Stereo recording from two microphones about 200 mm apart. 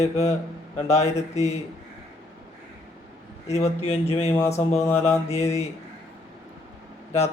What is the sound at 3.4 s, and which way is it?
Speech, 35° left (ahead or behind).